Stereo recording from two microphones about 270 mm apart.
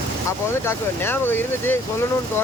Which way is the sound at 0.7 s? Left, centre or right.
Centre.